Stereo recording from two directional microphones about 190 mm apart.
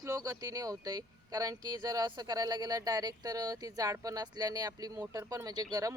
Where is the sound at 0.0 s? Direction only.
20° right (ahead or behind).